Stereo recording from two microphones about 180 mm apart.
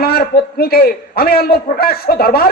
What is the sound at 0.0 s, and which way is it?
A man's voice, 60° left (ahead or behind).